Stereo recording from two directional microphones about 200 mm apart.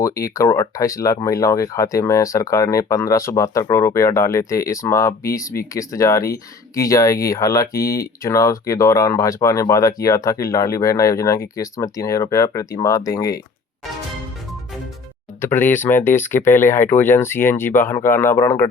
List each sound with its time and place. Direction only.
0.0 s speech: 15° left (ahead or behind)
15.4 s speech: 10° left (ahead or behind)